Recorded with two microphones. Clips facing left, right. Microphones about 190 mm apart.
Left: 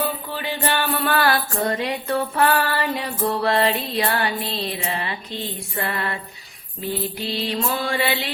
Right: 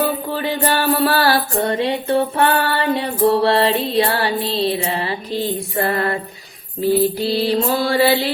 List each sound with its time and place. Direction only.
0.0 s music: 40° right (ahead or behind)